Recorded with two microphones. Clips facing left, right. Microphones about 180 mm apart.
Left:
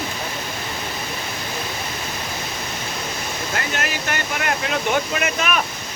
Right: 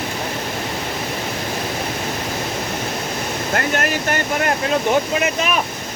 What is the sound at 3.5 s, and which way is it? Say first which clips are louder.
Speech: right 6 dB; 50° right (ahead or behind).